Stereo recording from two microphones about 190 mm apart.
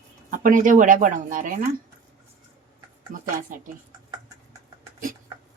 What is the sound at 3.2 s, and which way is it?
Speech, 45° right (ahead or behind).